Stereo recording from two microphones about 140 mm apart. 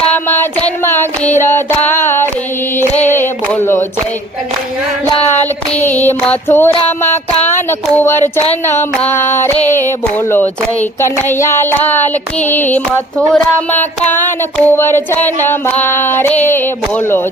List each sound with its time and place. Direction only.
0.1 s child singing: 15° left (ahead or behind)
1.9 s music: 15° left (ahead or behind)
2.7 s a sound: 15° left (ahead or behind)
5.2 s music: 15° left (ahead or behind)
7.4 s child singing: 15° left (ahead or behind)
8.6 s a sound: 15° left (ahead or behind)